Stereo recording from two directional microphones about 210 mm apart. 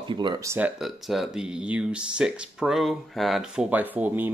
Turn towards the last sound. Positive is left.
turn(degrees=-10)  # may be behind; listen again after turning